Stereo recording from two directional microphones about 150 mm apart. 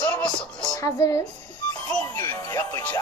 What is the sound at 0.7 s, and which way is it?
Speech, 20° left (ahead or behind).